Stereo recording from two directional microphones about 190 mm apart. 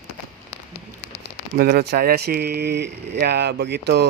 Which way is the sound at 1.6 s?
55° right (ahead or behind).